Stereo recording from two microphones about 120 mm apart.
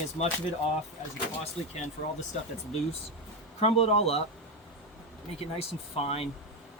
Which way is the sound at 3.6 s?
60° left (ahead or behind).